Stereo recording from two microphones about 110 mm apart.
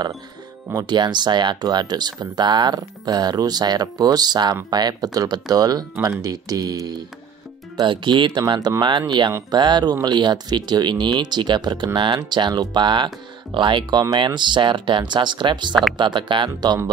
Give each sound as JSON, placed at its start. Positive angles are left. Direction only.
{"t": 0.7, "sound": "speech", "side_deg": -40}
{"t": 7.7, "sound": "speech", "side_deg": -45}